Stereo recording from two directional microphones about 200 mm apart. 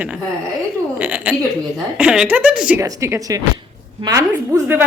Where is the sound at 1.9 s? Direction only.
5° right (ahead or behind).